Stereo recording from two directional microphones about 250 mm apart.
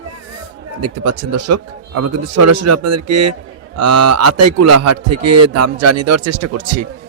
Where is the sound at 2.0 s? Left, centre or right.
Right.